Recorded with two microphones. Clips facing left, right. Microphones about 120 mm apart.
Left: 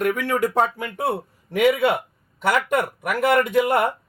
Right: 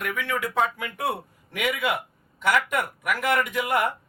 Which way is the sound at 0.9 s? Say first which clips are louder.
Left 5 dB; 30° left (ahead or behind).